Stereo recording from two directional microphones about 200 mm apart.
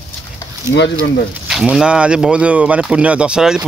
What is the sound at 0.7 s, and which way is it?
Speech, 15° right (ahead or behind).